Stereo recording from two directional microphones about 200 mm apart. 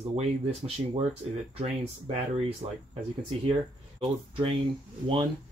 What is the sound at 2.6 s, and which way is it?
Speech, 30° right (ahead or behind).